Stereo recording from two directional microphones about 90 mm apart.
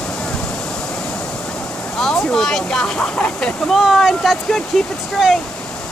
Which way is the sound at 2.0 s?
5° left (ahead or behind).